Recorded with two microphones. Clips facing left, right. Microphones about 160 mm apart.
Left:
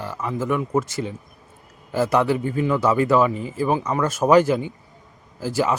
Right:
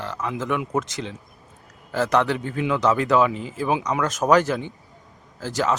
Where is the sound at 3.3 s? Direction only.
50° left (ahead or behind).